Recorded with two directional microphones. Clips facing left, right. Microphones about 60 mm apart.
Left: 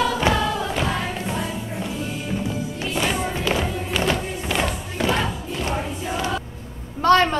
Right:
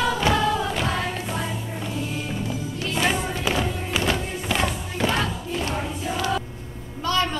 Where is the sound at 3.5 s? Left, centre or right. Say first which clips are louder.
Left 1 dB; centre.